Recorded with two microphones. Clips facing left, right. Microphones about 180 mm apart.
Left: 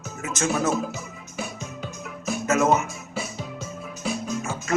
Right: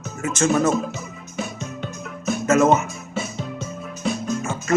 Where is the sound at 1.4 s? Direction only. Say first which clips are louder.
Right 4 dB; centre (ahead or behind).